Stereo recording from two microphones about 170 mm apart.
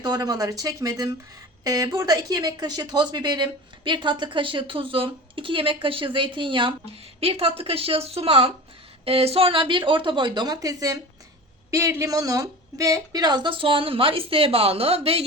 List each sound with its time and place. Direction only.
0.0 s a woman's voice: 25° right (ahead or behind)